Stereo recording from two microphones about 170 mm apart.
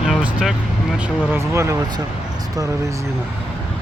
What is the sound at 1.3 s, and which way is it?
Speech, 15° right (ahead or behind).